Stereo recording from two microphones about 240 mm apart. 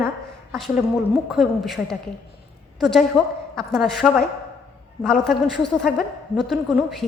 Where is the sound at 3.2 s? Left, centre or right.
Centre.